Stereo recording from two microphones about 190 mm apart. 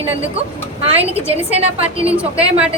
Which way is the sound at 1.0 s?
30° right (ahead or behind).